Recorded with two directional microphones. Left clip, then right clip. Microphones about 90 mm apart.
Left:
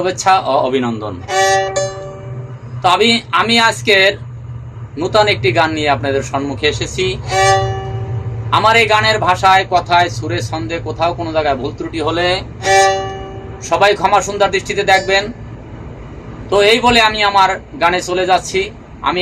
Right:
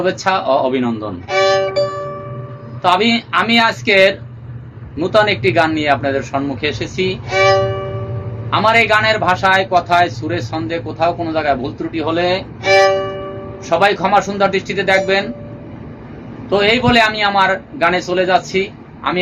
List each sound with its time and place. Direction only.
0.0 s a man's voice: 5° right (ahead or behind)
1.3 s speech: 25° left (ahead or behind)
2.8 s a man's voice: centre (ahead or behind)
7.3 s speech: 30° left (ahead or behind)
8.4 s a man's voice: 5° right (ahead or behind)
12.6 s speech: 30° left (ahead or behind)
13.7 s a man's voice: 5° right (ahead or behind)
16.5 s a man's voice: 5° right (ahead or behind)